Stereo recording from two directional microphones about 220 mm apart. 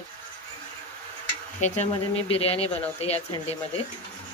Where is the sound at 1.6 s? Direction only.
30° left (ahead or behind).